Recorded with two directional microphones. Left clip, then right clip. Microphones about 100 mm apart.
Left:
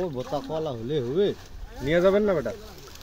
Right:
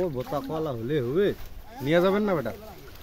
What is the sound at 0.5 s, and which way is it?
Speech, 10° right (ahead or behind).